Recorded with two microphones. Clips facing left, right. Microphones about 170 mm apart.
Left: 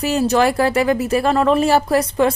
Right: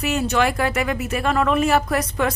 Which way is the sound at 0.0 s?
35° left (ahead or behind).